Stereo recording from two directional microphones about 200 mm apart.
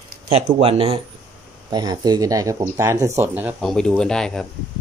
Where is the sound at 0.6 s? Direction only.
30° right (ahead or behind); by 4.5 s 5° left (ahead or behind).